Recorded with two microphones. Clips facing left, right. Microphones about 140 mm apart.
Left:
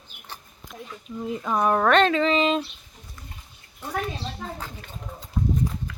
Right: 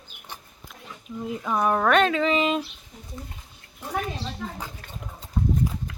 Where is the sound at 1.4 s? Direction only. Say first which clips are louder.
Left 1 dB; centre (ahead or behind).